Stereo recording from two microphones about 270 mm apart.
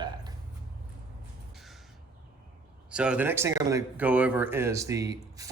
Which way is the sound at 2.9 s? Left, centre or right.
Centre.